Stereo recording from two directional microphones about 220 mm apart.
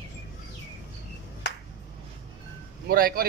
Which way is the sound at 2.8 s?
40° right (ahead or behind).